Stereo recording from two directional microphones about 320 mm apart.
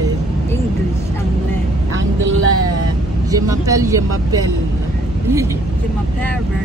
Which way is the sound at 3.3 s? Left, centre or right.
Centre.